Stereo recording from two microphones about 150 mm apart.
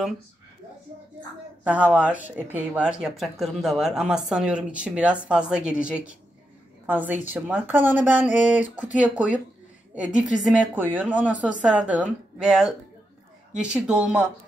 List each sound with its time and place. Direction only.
1.6 s speech: 10° right (ahead or behind)